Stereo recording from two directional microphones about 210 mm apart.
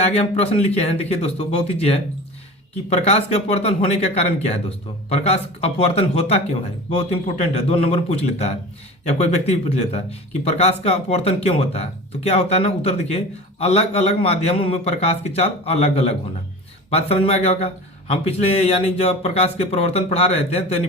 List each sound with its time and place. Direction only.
0.0 s speech: 30° left (ahead or behind)